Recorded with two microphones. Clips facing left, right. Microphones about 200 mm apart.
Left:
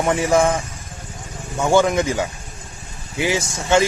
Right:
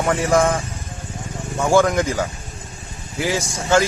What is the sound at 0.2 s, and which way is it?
A man's voice, centre (ahead or behind).